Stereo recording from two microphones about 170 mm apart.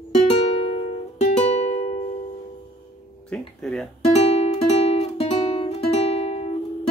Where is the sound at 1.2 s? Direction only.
40° left (ahead or behind).